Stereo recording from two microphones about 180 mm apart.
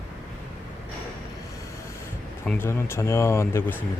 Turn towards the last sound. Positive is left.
turn(degrees=10)  # may be behind; listen again after turning